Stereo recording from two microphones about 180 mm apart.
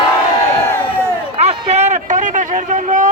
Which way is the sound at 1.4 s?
35° right (ahead or behind).